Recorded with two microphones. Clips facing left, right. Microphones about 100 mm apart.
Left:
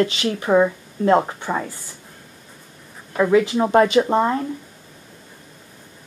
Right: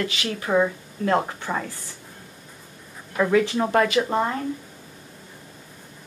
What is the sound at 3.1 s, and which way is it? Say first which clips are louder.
A woman's voice: left 4 dB; 15° left (ahead or behind).